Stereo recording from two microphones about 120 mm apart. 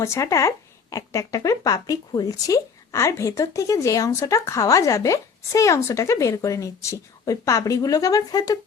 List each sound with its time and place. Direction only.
0.0 s a woman's voice: 25° left (ahead or behind)